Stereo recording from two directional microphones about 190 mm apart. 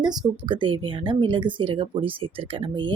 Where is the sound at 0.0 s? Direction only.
20° right (ahead or behind).